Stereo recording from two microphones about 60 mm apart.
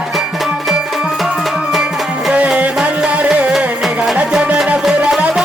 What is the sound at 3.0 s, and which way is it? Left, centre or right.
Music, centre.